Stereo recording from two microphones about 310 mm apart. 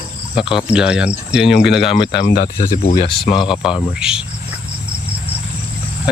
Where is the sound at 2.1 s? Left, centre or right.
Left.